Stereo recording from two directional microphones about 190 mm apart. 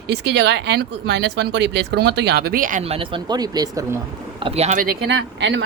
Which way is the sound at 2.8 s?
30° right (ahead or behind).